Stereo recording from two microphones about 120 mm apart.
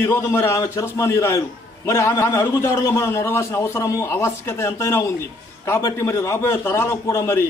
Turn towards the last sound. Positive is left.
turn(degrees=25)  # may be behind; listen again after turning